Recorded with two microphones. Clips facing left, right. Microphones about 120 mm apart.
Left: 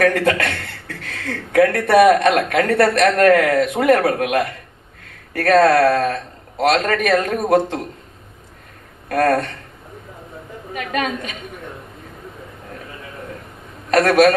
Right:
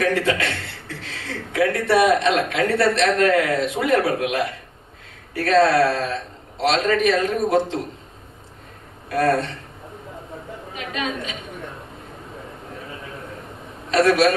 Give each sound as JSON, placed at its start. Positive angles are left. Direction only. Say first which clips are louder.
{"t": 0.0, "sound": "a man's voice", "louder": "left 4 dB", "side_deg": 55}
{"t": 9.0, "sound": "a man's voice", "louder": "left 3 dB", "side_deg": 55}
{"t": 10.8, "sound": "a woman's voice", "louder": "left 5 dB", "side_deg": 55}
{"t": 13.9, "sound": "a woman's voice", "louder": "left 3 dB", "side_deg": 55}